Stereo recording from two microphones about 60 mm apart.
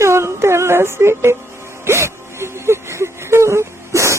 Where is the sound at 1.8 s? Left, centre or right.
Right.